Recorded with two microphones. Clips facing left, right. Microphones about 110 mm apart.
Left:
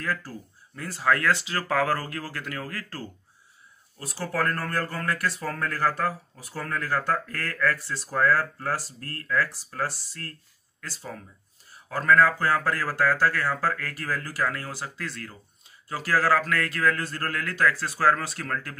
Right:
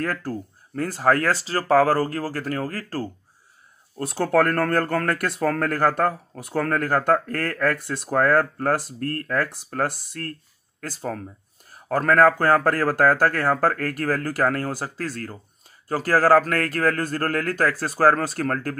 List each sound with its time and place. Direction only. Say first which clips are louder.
0.0 s speech: right 5 dB; 50° right (ahead or behind)
4.0 s a man's voice: right 9 dB; 60° right (ahead or behind); by 18.8 s 45° right (ahead or behind)